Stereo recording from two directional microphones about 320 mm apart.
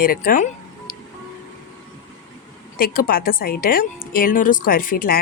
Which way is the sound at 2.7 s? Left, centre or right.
Left.